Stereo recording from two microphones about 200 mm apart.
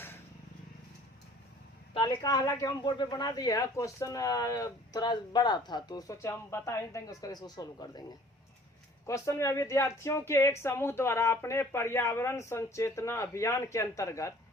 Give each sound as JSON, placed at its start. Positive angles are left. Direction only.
{"t": 1.9, "sound": "speech", "side_deg": 20}
{"t": 9.0, "sound": "speech", "side_deg": 15}